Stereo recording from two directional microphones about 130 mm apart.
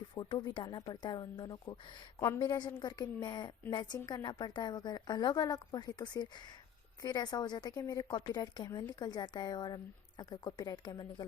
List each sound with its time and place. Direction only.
0.1 s a woman's voice: 30° left (ahead or behind)